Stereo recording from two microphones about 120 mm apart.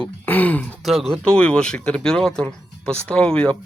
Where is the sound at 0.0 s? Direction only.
15° left (ahead or behind).